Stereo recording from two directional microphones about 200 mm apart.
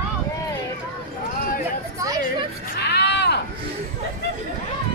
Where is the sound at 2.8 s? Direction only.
55° left (ahead or behind).